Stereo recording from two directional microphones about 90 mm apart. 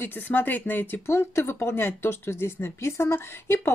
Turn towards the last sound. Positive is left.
turn(degrees=30)  # may be behind; listen again after turning